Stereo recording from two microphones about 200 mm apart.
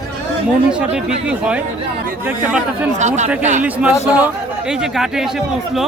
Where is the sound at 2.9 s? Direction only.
35° right (ahead or behind).